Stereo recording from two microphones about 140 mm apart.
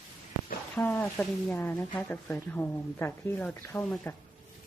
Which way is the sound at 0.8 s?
10° left (ahead or behind).